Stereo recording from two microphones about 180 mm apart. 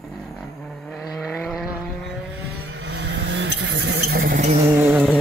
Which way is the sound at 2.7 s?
90° right.